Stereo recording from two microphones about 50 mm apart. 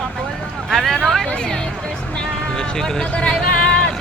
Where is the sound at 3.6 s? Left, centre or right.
Centre.